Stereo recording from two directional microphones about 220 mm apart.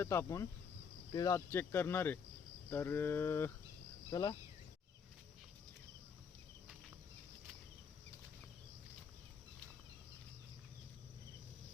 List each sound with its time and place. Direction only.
0.0 s speech: 10° left (ahead or behind)